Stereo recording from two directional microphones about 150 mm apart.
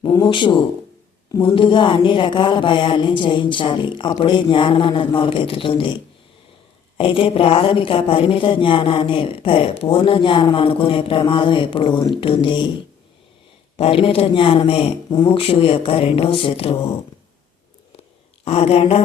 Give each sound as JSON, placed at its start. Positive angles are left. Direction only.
{"t": 0.0, "sound": "speech", "side_deg": 30}
{"t": 13.7, "sound": "speech", "side_deg": 40}
{"t": 18.4, "sound": "a sound", "side_deg": 45}